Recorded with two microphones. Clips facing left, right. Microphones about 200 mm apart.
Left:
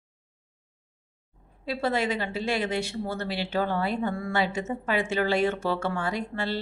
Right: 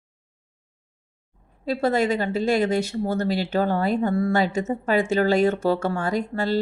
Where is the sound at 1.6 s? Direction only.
45° right (ahead or behind).